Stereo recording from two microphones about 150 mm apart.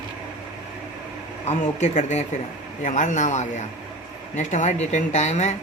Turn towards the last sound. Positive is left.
turn(degrees=50)  # may be behind; listen again after turning